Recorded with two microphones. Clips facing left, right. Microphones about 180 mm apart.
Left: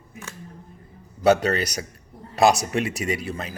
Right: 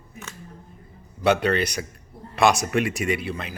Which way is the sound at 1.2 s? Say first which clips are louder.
Left 2 dB; 40° left (ahead or behind).